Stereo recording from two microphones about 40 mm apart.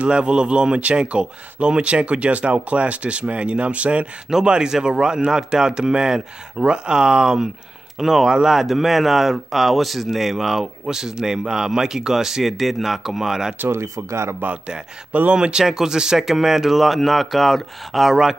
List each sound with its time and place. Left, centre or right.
0.0 s speech: right
4.5 s speech: centre
14.4 s speech: right
15.3 s speech: right; by 18.1 s centre